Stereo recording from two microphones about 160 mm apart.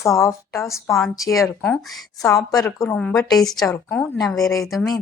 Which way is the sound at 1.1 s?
20° left (ahead or behind).